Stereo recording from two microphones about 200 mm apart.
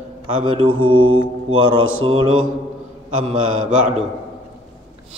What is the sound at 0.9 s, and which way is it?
Mantra, 90° right.